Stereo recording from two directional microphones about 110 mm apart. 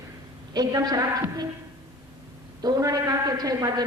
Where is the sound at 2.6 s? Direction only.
35° right (ahead or behind).